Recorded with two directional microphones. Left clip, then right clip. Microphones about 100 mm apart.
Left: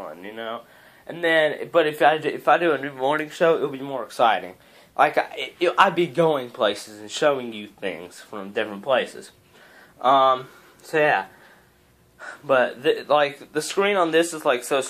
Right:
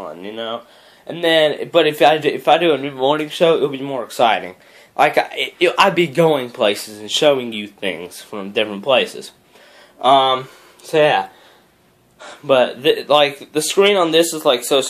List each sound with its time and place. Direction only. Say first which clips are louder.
0.2 s speech: right 8 dB; 25° right (ahead or behind); by 14.6 s 10° right (ahead or behind)